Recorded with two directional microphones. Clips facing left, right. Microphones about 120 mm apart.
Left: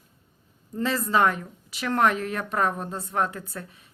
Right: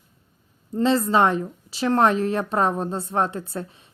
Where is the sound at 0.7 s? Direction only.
30° right (ahead or behind).